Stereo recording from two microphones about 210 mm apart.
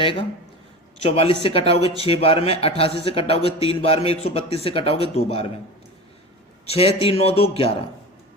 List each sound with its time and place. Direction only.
0.0 s a man's voice: 25° left (ahead or behind)
6.7 s a man's voice: 25° left (ahead or behind)